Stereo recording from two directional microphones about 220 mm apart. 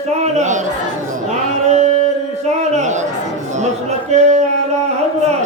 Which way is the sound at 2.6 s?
30° right (ahead or behind).